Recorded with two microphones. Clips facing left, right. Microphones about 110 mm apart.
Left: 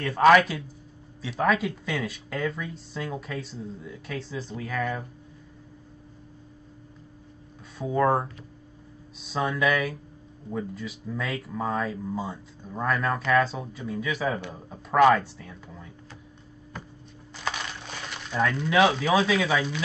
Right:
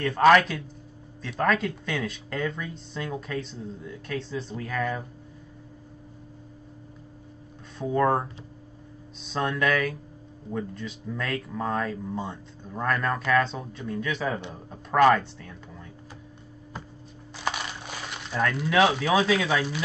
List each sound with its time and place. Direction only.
0.0 s speech: centre (ahead or behind)
7.8 s speech: 5° left (ahead or behind)
17.5 s a sound: 10° right (ahead or behind)
18.3 s speech: centre (ahead or behind)